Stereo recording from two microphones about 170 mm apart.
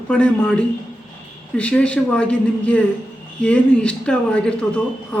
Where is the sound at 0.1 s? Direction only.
5° left (ahead or behind).